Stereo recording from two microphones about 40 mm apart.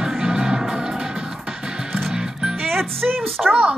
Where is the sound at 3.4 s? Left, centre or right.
Right.